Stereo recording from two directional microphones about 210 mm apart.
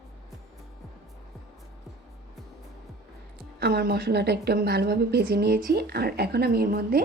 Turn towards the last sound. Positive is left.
turn(degrees=-45)  # may be behind; listen again after turning